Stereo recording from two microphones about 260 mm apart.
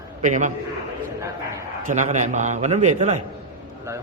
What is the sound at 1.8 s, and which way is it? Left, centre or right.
A man's voice, right.